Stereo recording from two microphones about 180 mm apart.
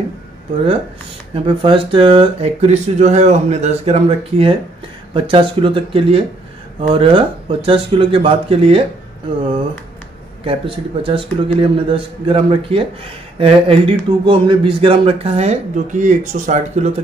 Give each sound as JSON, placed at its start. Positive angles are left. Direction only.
{"t": 1.3, "sound": "speech", "side_deg": -30}
{"t": 10.4, "sound": "speech", "side_deg": -30}